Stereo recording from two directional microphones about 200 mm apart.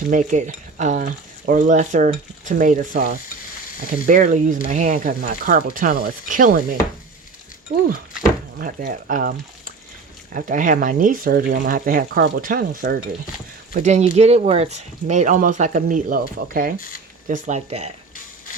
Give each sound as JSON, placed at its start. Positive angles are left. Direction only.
{"t": 0.1, "sound": "speech", "side_deg": -40}
{"t": 8.5, "sound": "speech", "side_deg": -45}
{"t": 10.3, "sound": "speech", "side_deg": -40}
{"t": 13.7, "sound": "speech", "side_deg": -35}